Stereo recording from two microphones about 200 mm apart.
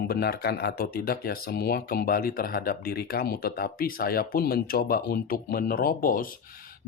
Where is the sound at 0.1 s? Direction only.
50° left (ahead or behind).